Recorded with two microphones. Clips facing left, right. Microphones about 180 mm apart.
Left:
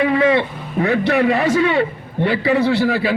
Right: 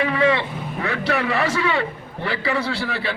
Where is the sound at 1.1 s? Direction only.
45° left (ahead or behind).